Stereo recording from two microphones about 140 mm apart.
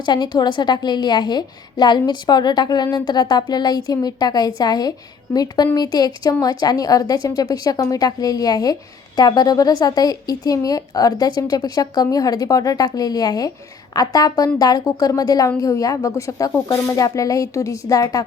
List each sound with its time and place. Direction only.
0.0 s a woman's voice: 30° left (ahead or behind)